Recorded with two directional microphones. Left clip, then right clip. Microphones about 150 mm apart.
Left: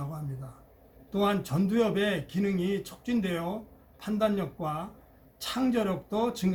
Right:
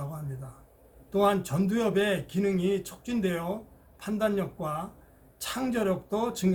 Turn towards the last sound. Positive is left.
turn(degrees=-20)  # may be behind; listen again after turning